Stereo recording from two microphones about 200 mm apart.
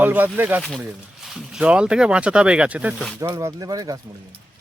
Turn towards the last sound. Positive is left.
turn(degrees=-20)  # may be behind; listen again after turning